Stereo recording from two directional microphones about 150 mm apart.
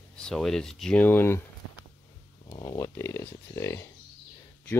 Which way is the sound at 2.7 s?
20° left (ahead or behind).